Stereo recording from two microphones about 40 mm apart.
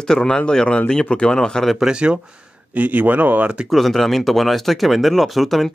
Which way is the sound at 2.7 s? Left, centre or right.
Right.